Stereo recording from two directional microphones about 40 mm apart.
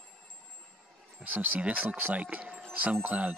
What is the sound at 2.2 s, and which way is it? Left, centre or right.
Speech, right.